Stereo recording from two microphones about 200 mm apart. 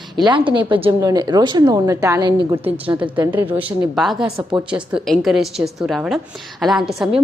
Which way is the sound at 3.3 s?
10° right (ahead or behind).